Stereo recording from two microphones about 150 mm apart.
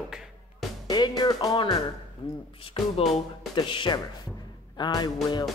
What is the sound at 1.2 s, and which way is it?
Speech, 25° left (ahead or behind).